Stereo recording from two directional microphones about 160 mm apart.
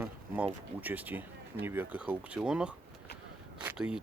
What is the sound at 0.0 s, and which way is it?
Speech, 10° right (ahead or behind).